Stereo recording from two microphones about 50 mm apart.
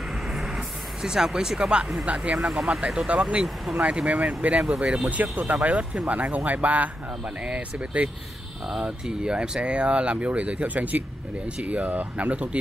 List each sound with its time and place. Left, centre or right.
0.3 s vehicle: centre
2.0 s speech: right
5.1 s speech: right
8.6 s speech: centre; by 12.4 s right